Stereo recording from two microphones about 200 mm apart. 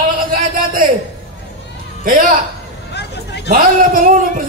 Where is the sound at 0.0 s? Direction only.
45° right (ahead or behind).